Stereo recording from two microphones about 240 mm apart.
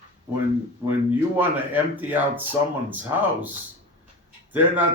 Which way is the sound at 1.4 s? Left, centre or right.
Centre.